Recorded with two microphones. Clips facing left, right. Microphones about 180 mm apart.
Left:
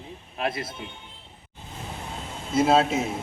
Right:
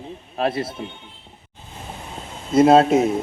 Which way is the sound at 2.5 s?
55° right (ahead or behind).